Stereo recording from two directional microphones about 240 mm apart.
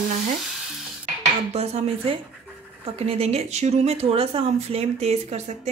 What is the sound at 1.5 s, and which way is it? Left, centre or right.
Speech, right.